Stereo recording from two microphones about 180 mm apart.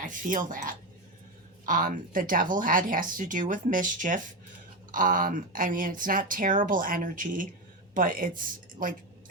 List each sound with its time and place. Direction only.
0.0 s speech: 45° right (ahead or behind)